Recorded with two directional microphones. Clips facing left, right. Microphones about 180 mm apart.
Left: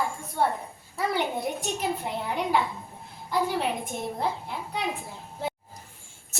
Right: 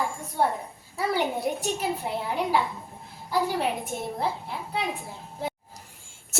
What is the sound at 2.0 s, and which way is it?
Speech, centre (ahead or behind).